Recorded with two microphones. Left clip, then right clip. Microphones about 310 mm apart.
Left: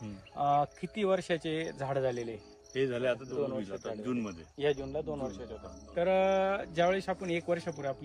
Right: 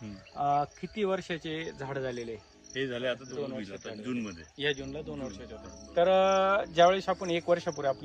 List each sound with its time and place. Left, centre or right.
0.3 s cricket: centre
0.6 s speech: left
5.9 s speech: centre